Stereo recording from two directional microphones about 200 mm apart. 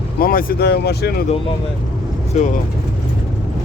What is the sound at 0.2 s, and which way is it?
Speech, 45° left (ahead or behind).